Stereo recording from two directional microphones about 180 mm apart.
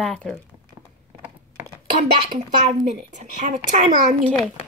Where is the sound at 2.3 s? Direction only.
40° right (ahead or behind).